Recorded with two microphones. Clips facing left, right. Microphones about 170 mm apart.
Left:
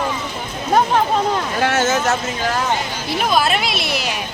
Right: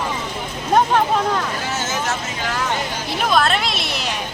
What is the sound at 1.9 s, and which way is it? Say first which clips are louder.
Speech: left 5 dB; 40° left (ahead or behind).